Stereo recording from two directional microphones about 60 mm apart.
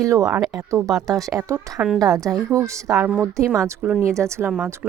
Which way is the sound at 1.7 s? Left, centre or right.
Centre.